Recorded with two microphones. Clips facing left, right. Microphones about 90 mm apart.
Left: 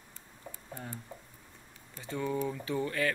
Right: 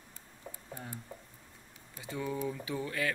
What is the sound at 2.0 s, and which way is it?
Speech, 5° right (ahead or behind).